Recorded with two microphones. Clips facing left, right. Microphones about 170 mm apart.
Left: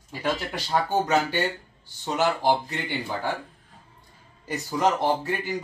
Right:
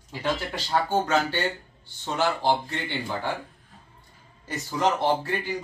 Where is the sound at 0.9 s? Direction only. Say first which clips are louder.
Left 2 dB; 15° left (ahead or behind).